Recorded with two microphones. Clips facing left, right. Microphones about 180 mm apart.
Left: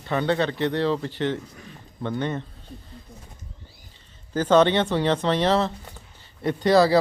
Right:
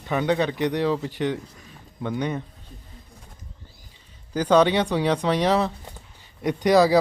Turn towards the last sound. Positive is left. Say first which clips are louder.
# even
turn(degrees=-15)  # may be behind; listen again after turning